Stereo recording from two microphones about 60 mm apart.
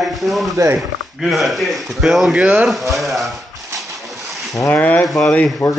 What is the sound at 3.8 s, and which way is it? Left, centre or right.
Waves, centre.